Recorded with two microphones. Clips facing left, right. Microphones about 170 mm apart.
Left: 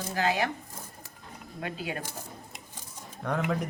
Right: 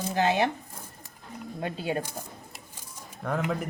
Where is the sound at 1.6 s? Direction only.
30° right (ahead or behind).